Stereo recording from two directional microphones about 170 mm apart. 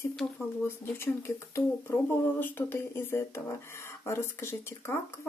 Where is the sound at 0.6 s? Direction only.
15° left (ahead or behind).